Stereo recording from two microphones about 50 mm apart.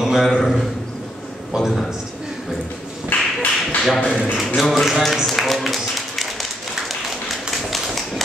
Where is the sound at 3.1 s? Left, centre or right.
Left.